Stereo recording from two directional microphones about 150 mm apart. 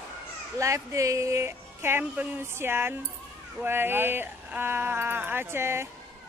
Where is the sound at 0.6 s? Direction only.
20° right (ahead or behind).